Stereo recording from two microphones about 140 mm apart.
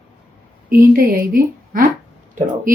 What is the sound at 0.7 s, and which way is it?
A woman's voice, 90° right.